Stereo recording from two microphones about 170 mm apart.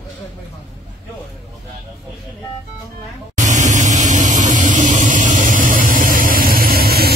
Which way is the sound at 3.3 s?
45° right (ahead or behind).